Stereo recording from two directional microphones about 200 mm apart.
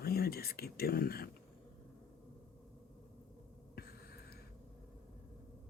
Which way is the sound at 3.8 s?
50° left (ahead or behind).